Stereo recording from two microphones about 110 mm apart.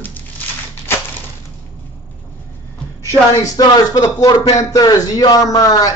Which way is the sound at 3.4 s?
30° left (ahead or behind).